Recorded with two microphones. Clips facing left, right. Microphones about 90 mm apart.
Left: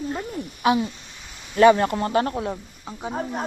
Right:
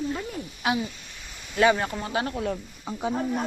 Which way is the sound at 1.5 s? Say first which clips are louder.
Left 6 dB; 60° left (ahead or behind).